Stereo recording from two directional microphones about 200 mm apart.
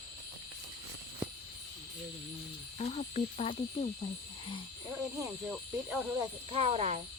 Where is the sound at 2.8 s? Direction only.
30° left (ahead or behind).